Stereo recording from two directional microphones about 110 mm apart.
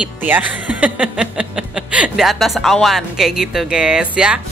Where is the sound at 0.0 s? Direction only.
15° right (ahead or behind).